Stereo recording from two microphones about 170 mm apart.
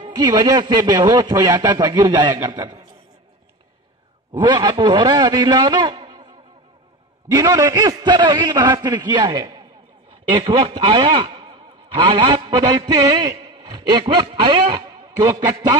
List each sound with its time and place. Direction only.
0.0 s a man's voice: 25° right (ahead or behind)
4.3 s a man's voice: 25° right (ahead or behind)
7.2 s a man's voice: 20° right (ahead or behind)